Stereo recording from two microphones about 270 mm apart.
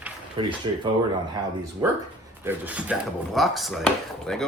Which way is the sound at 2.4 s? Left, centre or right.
Centre.